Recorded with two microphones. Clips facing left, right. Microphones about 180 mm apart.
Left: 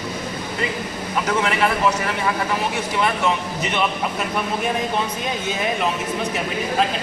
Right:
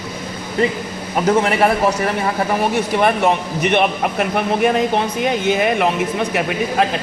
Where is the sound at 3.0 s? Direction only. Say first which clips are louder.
Right 5 dB; 60° right (ahead or behind).